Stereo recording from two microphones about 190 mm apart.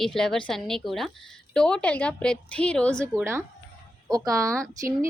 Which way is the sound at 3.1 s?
15° right (ahead or behind).